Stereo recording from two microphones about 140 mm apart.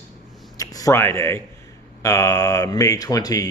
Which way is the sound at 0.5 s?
25° left (ahead or behind).